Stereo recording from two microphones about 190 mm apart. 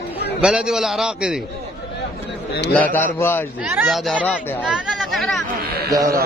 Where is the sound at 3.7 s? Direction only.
10° right (ahead or behind).